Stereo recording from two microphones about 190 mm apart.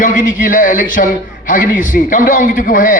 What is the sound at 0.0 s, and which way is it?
A man's voice, 45° left (ahead or behind).